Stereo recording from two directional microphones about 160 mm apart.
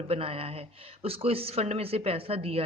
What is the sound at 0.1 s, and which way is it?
Speech, 35° right (ahead or behind).